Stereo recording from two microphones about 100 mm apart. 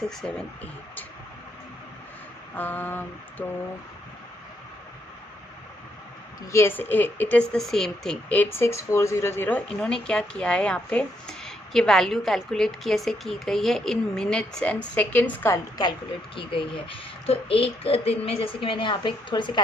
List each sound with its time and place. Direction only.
0.2 s a woman's voice: 10° left (ahead or behind)
2.6 s a sound: 20° left (ahead or behind)
6.5 s a sound: 25° left (ahead or behind)
7.5 s speech: 5° left (ahead or behind)
8.4 s a woman's voice: 25° left (ahead or behind)
15.8 s a woman's voice: 55° left (ahead or behind)